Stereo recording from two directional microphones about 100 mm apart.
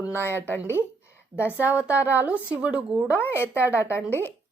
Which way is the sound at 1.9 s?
30° left (ahead or behind).